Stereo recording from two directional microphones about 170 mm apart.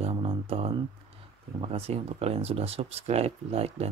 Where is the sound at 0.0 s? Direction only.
30° right (ahead or behind).